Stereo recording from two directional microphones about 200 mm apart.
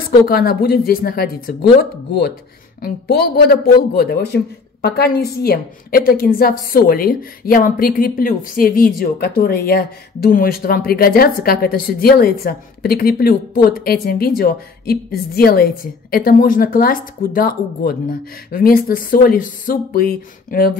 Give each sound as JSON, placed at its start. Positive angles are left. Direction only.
{"t": 0.3, "sound": "speech", "side_deg": 50}